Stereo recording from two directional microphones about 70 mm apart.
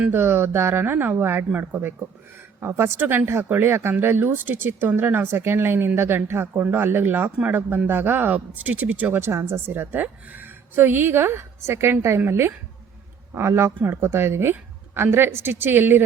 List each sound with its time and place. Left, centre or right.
0.1 s speech: right